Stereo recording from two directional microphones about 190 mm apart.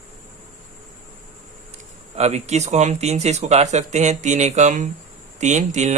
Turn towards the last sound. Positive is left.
turn(degrees=-40)  # may be behind; listen again after turning